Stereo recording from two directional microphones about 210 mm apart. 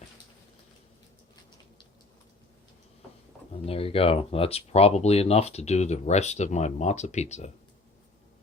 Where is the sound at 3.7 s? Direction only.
25° left (ahead or behind).